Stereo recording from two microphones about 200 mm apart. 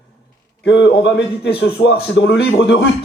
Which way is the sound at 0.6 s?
60° left (ahead or behind).